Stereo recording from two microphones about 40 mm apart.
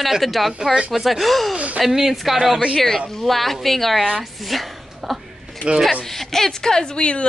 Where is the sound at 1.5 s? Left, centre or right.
Right.